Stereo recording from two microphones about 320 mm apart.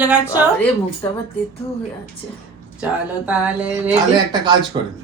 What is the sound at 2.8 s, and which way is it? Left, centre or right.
A woman's voice, centre.